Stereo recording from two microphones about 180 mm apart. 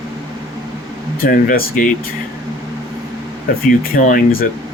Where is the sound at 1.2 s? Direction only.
55° left (ahead or behind).